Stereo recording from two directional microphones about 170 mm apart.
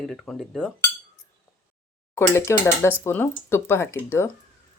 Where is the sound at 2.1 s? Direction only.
15° left (ahead or behind).